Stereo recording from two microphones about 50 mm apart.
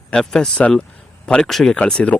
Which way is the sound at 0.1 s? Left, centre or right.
Centre.